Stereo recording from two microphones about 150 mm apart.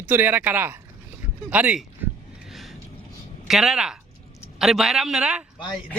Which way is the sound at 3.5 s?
5° right (ahead or behind).